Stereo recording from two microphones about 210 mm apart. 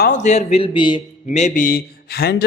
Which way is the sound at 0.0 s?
35° left (ahead or behind).